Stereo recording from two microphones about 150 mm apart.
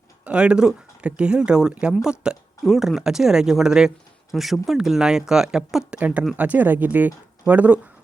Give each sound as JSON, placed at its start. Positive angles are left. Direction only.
{"t": 0.3, "sound": "speech", "side_deg": -5}